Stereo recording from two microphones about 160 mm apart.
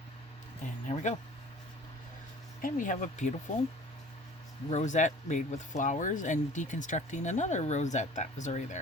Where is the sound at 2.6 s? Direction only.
55° left (ahead or behind).